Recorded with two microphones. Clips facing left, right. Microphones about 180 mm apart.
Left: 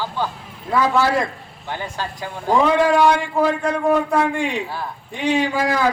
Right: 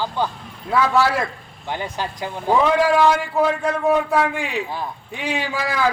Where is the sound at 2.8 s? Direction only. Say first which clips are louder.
Left 1 dB; 5° right (ahead or behind).